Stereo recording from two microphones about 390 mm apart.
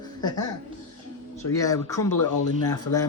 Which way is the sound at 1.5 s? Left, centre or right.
Centre.